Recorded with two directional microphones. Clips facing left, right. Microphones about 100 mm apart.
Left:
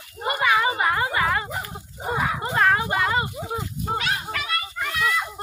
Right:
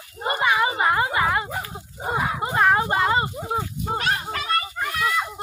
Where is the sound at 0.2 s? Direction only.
25° right (ahead or behind).